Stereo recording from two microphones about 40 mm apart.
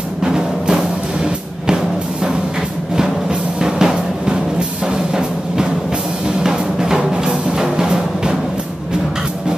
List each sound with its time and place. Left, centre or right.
0.2 s music: centre
3.0 s music: centre